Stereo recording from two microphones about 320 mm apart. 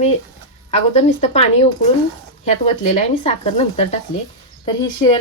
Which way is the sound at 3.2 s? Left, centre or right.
Centre.